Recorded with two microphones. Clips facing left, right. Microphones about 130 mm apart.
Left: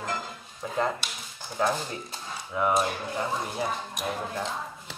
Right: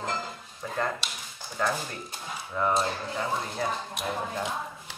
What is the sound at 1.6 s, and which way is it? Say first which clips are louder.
Speech: left 2 dB; 15° left (ahead or behind).